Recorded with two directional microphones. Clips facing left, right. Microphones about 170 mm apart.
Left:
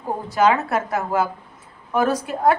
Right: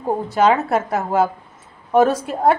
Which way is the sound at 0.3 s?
30° right (ahead or behind).